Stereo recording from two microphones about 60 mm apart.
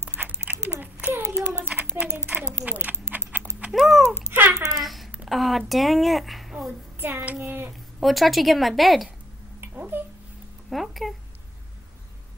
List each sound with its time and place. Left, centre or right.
0.0 s dog: centre
0.9 s a sound: right
1.7 s a child's voice: right
2.2 s typing: right
3.7 s a woman's voice: centre
4.3 s speech: right
4.6 s babbling: centre
5.3 s a woman's voice: centre
7.0 s child singing: right
8.0 s a woman's voice: centre
9.6 s cat: right
10.7 s a woman's voice: centre